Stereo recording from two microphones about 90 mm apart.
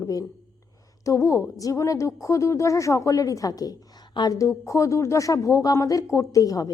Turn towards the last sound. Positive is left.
turn(degrees=40)  # may be behind; listen again after turning